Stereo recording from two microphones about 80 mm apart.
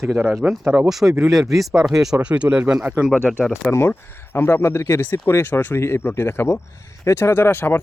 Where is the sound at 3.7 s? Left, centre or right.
Left.